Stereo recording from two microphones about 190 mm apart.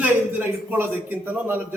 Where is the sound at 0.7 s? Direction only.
10° right (ahead or behind).